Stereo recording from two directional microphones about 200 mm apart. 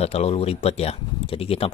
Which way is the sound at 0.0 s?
30° left (ahead or behind).